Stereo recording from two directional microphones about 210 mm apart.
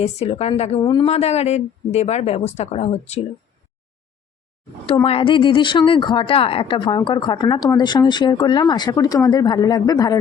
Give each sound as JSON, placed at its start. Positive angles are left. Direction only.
{"t": 0.0, "sound": "a woman's voice", "side_deg": 30}
{"t": 4.9, "sound": "speech", "side_deg": 25}